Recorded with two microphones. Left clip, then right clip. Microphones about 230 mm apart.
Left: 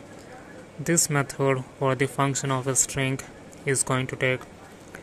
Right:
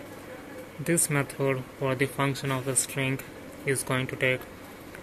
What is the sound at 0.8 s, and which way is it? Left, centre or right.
Speech, centre.